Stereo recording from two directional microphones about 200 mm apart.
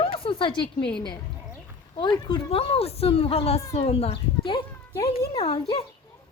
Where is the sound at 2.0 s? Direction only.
20° left (ahead or behind).